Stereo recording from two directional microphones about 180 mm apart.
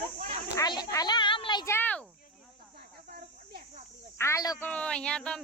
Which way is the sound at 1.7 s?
10° left (ahead or behind).